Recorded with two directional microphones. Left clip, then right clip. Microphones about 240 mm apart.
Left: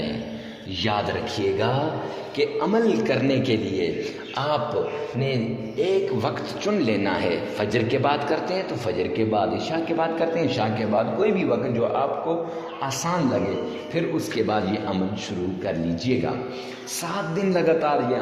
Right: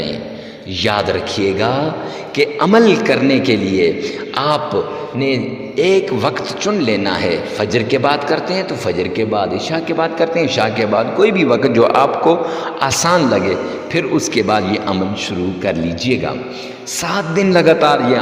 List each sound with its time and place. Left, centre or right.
0.8 s a man's voice: right